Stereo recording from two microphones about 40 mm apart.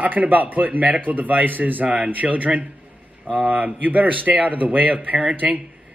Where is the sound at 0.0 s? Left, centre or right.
Right.